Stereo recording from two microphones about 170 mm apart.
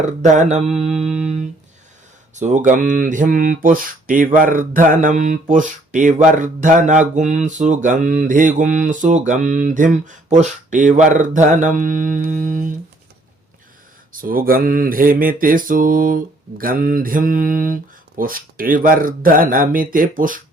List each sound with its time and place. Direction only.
0.2 s mantra: 45° right (ahead or behind)
2.3 s speech: 45° right (ahead or behind)
14.2 s mantra: 55° right (ahead or behind)